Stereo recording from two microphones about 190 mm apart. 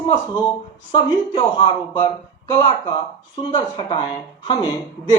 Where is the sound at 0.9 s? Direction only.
20° left (ahead or behind).